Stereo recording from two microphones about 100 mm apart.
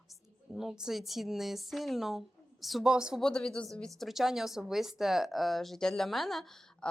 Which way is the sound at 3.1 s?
5° left (ahead or behind).